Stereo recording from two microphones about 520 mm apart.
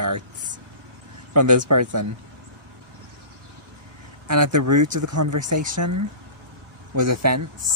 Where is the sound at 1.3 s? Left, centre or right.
Right.